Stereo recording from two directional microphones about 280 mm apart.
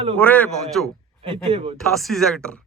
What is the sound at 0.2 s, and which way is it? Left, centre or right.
Speech, centre.